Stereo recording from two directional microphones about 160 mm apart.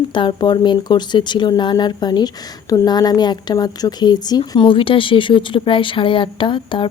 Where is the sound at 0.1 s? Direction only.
30° left (ahead or behind).